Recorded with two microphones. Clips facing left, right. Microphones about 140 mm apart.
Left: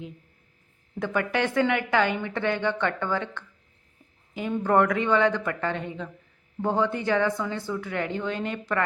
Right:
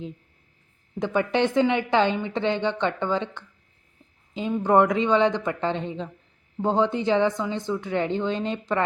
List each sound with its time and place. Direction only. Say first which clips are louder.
0.9 s a woman's voice: right 3 dB; 20° right (ahead or behind)
4.6 s a woman's voice: right 3 dB; 20° right (ahead or behind)